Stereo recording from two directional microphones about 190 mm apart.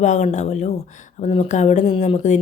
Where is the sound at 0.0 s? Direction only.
40° left (ahead or behind).